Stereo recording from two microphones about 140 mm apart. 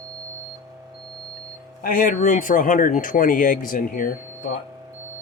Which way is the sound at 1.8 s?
90° left.